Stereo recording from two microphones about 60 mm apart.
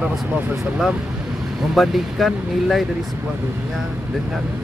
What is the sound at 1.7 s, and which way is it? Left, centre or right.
Speech, centre.